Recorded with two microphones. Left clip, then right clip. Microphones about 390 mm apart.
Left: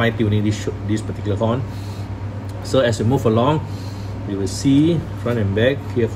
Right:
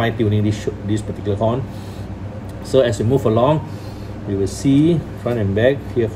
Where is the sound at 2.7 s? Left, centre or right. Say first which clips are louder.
Right 2 dB; centre.